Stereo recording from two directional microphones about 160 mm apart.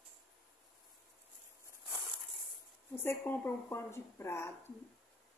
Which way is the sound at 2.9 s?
15° left (ahead or behind).